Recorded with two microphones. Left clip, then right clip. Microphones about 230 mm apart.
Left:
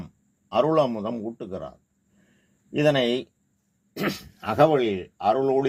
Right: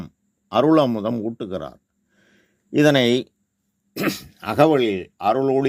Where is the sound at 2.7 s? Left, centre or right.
Right.